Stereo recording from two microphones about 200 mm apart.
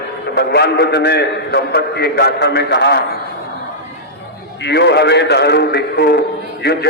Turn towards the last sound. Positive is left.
turn(degrees=55)  # may be behind; listen again after turning